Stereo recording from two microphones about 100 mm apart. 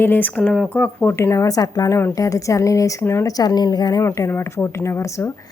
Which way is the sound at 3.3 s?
40° left (ahead or behind).